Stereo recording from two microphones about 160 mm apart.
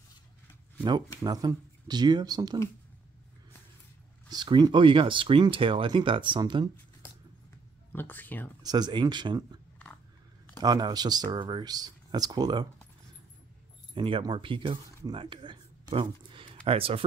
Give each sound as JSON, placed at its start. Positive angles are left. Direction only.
{"t": 1.2, "sound": "speech", "side_deg": -25}
{"t": 4.3, "sound": "speech", "side_deg": -25}
{"t": 7.9, "sound": "speech", "side_deg": 10}
{"t": 8.6, "sound": "speech", "side_deg": -25}
{"t": 10.6, "sound": "speech", "side_deg": -25}
{"t": 13.9, "sound": "speech", "side_deg": -30}